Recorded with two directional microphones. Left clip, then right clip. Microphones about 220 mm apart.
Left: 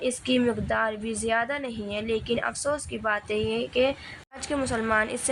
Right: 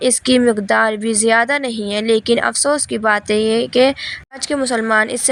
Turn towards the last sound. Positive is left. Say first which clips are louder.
# right 10 dB
turn(degrees=-30)  # may be behind; listen again after turning